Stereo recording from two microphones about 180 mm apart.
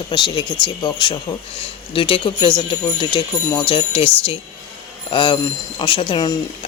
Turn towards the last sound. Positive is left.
turn(degrees=25)  # may be behind; listen again after turning